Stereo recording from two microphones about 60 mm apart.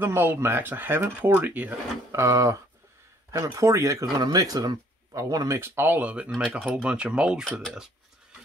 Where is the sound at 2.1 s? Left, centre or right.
Right.